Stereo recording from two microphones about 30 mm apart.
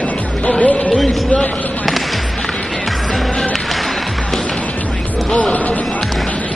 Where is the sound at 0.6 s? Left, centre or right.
Left.